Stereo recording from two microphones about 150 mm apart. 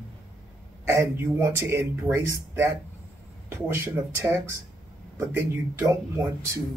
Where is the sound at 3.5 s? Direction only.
15° right (ahead or behind).